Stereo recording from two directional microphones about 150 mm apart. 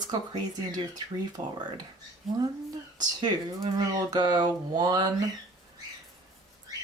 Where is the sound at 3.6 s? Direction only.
30° right (ahead or behind).